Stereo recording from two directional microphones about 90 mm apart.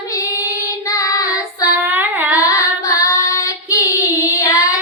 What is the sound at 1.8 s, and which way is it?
Child singing, 20° right (ahead or behind).